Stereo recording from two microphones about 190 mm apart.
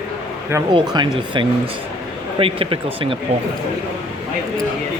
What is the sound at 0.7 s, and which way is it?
Speech, 25° right (ahead or behind).